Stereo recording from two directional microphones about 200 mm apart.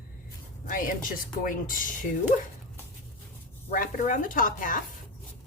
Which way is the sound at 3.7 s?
40° left (ahead or behind).